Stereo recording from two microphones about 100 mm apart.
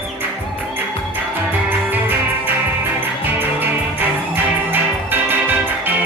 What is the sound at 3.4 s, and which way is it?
Music, 20° right (ahead or behind).